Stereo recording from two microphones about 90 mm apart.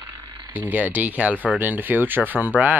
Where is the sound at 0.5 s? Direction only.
20° right (ahead or behind).